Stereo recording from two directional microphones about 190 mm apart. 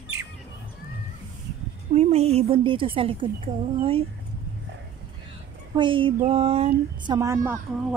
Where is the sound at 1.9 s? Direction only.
35° right (ahead or behind).